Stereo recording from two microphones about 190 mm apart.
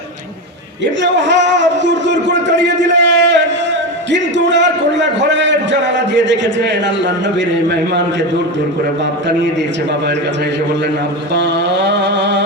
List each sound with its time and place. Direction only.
1.0 s a sound: 70° right (ahead or behind)
4.1 s a man's voice: 70° right (ahead or behind)
11.3 s a man's voice: 65° right (ahead or behind)